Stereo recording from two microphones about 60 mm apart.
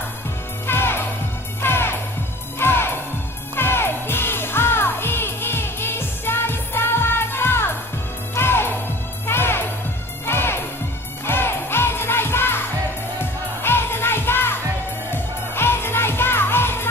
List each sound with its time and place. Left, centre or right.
0.7 s music: left